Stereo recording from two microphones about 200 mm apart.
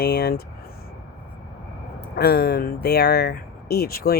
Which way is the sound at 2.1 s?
55° left (ahead or behind).